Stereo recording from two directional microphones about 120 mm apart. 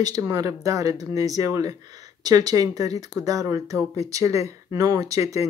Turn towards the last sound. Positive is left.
turn(degrees=-30)  # may be behind; listen again after turning